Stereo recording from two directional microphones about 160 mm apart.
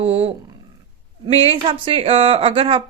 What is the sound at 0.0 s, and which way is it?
Speech, 40° right (ahead or behind).